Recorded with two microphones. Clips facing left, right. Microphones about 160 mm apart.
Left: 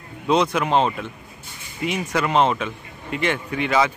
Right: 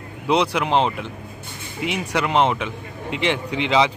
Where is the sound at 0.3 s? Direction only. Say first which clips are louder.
Even; 10° right (ahead or behind).